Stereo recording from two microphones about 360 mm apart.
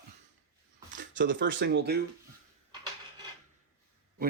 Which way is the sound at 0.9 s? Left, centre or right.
Right.